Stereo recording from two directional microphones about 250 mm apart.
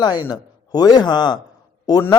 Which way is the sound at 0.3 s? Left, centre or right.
Centre.